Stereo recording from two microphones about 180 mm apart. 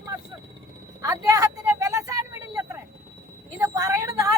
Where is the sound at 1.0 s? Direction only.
15° right (ahead or behind).